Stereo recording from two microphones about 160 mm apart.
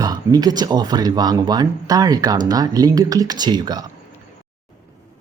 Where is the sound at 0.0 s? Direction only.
25° right (ahead or behind).